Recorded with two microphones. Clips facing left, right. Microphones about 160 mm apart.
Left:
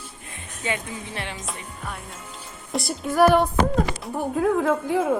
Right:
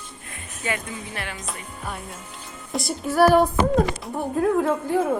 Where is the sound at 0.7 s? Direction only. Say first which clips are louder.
Even; 25° left (ahead or behind).